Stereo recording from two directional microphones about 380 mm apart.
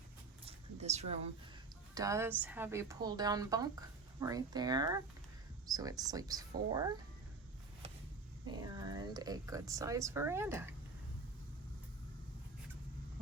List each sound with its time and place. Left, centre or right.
0.4 s a sound: centre
2.0 s speech: centre
8.4 s speech: centre